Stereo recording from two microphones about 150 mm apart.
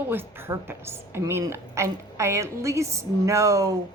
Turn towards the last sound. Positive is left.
turn(degrees=-20)  # may be behind; listen again after turning